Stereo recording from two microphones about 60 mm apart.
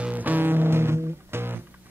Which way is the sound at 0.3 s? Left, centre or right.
Right.